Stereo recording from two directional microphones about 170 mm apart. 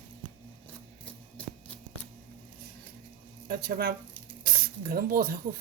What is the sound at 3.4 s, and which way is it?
Speech, 65° right (ahead or behind).